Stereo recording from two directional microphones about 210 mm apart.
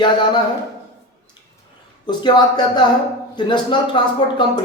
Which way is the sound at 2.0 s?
20° left (ahead or behind).